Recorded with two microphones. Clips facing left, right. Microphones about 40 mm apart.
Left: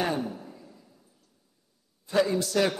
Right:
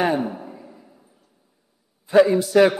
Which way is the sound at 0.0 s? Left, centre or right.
Right.